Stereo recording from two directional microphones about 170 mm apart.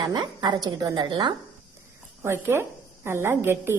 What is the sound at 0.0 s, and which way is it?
A woman's voice, 25° right (ahead or behind).